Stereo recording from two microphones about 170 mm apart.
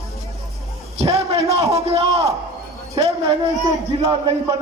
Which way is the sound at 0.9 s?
35° right (ahead or behind).